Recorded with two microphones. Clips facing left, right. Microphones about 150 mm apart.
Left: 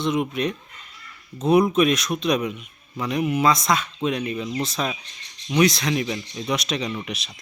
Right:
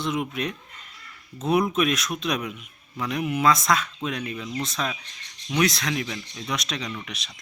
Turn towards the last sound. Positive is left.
turn(degrees=25)  # may be behind; listen again after turning